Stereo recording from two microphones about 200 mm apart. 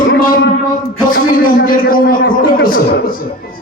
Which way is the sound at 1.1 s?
45° left (ahead or behind).